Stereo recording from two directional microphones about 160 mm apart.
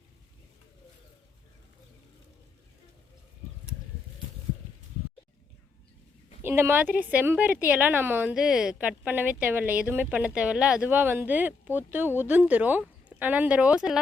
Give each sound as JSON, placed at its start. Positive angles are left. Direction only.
{"t": 6.4, "sound": "a woman's voice", "side_deg": -15}